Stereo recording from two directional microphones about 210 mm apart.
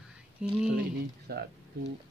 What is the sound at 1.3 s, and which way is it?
Speech, 50° right (ahead or behind).